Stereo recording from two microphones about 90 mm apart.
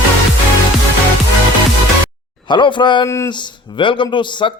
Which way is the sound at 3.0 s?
30° left (ahead or behind).